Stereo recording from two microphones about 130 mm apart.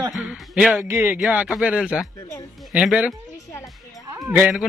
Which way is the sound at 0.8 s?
15° right (ahead or behind).